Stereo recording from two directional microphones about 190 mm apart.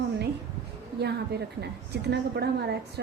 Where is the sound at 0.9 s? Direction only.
60° right (ahead or behind).